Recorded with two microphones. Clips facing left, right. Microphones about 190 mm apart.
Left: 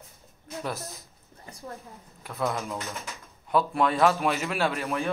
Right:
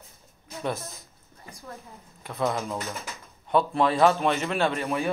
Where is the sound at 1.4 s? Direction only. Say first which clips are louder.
Left 3 dB; 30° left (ahead or behind).